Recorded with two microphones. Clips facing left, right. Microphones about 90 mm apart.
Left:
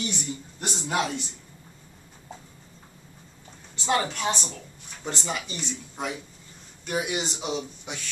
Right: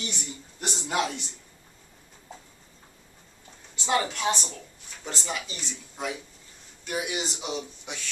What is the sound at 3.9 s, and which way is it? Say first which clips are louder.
Speech: right 2 dB; 5° left (ahead or behind).